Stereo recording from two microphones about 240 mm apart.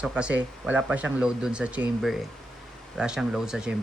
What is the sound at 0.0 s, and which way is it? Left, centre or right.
Speech, centre.